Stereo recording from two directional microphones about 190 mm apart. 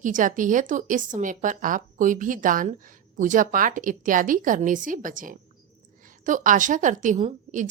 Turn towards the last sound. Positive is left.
turn(degrees=-35)  # may be behind; listen again after turning